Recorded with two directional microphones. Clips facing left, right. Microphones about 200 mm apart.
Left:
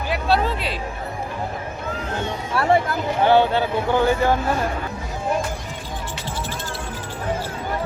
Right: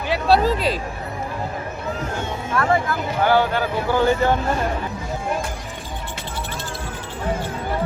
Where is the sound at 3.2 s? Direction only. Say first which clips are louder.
Left 2 dB; 25° left (ahead or behind).